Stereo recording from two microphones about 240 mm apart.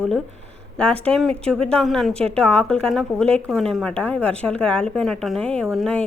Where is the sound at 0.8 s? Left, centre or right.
Centre.